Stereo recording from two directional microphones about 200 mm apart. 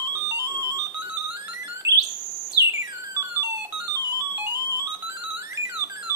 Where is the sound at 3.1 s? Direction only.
15° right (ahead or behind).